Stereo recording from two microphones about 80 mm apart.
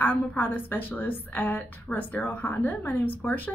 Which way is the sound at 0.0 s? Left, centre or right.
Left.